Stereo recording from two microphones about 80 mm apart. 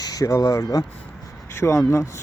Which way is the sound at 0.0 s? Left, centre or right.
Left.